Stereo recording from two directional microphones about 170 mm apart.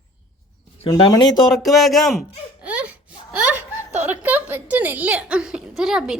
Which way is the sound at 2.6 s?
10° right (ahead or behind).